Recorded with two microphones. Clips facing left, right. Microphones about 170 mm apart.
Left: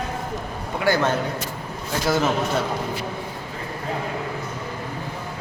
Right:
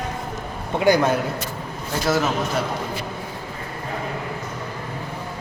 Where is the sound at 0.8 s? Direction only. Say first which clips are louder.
Right 3 dB; 15° right (ahead or behind).